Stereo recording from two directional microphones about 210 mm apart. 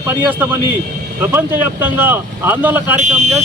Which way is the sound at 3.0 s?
35° right (ahead or behind).